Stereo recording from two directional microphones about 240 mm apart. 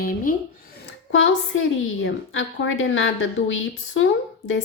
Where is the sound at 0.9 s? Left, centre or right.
Left.